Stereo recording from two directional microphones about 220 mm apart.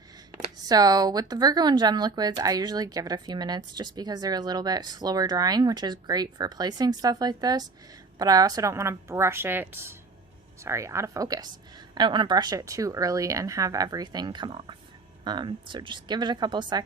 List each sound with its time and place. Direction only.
0.6 s speech: 15° right (ahead or behind)